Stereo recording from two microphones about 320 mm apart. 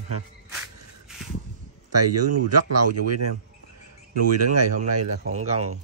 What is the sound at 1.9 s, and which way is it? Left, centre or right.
Speech, right.